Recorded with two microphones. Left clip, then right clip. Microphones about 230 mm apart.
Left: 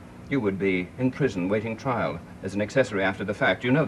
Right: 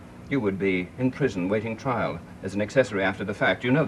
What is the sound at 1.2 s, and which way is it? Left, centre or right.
Speech, right.